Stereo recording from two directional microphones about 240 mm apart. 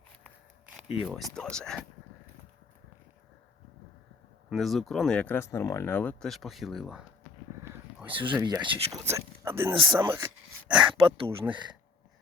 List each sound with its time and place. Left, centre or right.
0.7 s speech: centre
4.4 s speech: centre; by 11.3 s right